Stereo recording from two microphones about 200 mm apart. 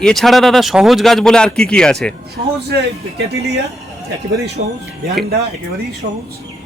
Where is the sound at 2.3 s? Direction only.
55° right (ahead or behind).